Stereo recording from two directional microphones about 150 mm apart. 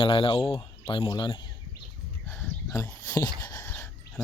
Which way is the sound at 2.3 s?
15° left (ahead or behind).